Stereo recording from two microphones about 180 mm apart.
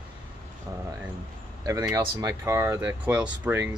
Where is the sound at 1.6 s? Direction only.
15° right (ahead or behind).